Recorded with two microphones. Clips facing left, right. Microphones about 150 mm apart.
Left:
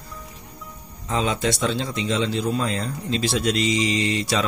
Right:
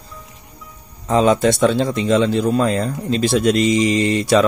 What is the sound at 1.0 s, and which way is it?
Speech, 45° right (ahead or behind).